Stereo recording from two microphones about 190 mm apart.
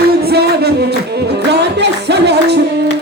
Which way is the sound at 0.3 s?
55° right (ahead or behind).